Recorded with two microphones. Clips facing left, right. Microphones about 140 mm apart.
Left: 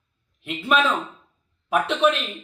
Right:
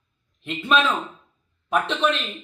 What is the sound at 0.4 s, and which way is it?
A man's voice, 5° left (ahead or behind).